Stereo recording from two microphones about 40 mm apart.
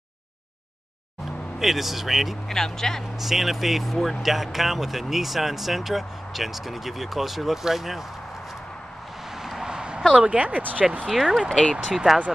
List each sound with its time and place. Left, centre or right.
1.6 s speech: centre
2.4 s speech: centre
3.0 s speech: centre
9.4 s a sound: centre
10.1 s speech: right
11.1 s speech: centre
12.1 s speech: right